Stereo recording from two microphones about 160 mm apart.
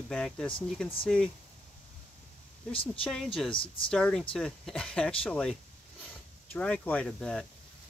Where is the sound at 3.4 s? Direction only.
35° left (ahead or behind).